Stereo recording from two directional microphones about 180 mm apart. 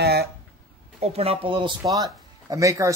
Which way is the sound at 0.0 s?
65° right (ahead or behind).